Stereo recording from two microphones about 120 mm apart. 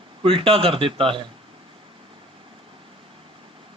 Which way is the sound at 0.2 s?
50° right (ahead or behind).